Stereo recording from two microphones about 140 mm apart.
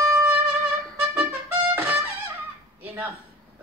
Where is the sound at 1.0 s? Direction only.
10° right (ahead or behind).